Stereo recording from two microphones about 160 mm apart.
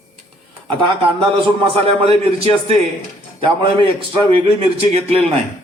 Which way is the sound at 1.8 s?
40° right (ahead or behind).